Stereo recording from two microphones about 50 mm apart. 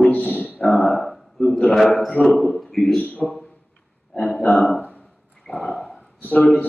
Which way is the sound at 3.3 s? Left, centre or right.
Left.